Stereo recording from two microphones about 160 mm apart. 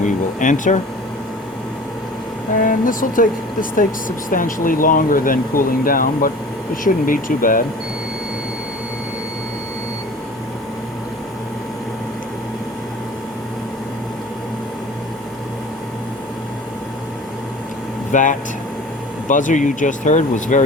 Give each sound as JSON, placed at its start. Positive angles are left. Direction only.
{"t": 0.0, "sound": "air conditioning", "side_deg": 55}
{"t": 2.6, "sound": "speech", "side_deg": 55}
{"t": 18.1, "sound": "speech", "side_deg": 55}